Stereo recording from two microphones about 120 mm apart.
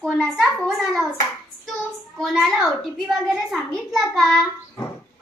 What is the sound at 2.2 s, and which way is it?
Speech, centre (ahead or behind).